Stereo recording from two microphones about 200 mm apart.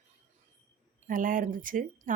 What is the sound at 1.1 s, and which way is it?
Speech, 45° right (ahead or behind).